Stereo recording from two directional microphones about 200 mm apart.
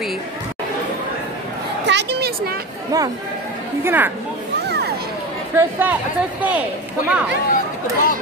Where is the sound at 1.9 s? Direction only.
60° right (ahead or behind).